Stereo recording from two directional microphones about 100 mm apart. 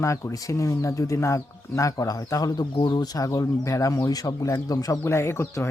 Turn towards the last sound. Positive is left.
turn(degrees=25)  # may be behind; listen again after turning